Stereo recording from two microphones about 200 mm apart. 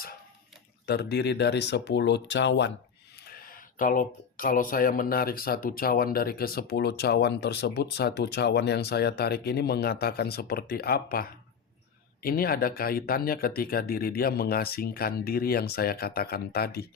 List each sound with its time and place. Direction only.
0.9 s speech: 55° left (ahead or behind)
3.2 s speech: 50° left (ahead or behind)